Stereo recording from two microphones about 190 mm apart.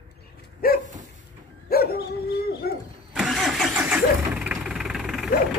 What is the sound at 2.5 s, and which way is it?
Owl, 55° left (ahead or behind).